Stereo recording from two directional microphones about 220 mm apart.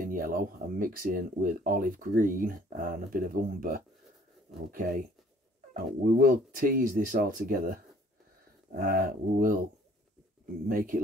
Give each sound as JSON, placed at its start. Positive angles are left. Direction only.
{"t": 0.0, "sound": "speech", "side_deg": -40}
{"t": 10.7, "sound": "speech", "side_deg": -40}